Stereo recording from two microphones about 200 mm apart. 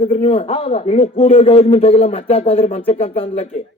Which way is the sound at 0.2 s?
30° left (ahead or behind).